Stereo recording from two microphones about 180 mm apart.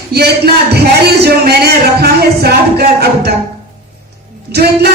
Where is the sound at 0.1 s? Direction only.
60° right (ahead or behind).